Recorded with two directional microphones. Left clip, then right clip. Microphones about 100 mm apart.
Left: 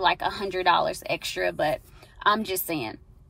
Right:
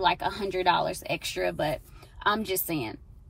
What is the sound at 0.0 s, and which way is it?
A woman's voice, 20° left (ahead or behind).